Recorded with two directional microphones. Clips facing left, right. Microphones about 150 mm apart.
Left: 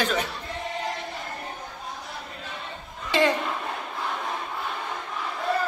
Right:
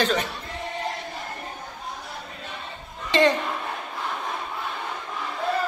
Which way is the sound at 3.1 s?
5° left (ahead or behind).